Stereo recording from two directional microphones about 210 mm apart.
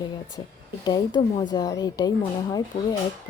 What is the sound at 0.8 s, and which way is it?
A woman's voice, 15° left (ahead or behind).